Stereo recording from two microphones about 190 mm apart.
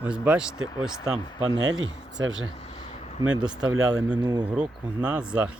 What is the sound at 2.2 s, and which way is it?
Speech, 90° right.